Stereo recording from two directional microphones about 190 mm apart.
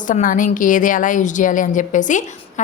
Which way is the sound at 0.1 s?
45° left (ahead or behind).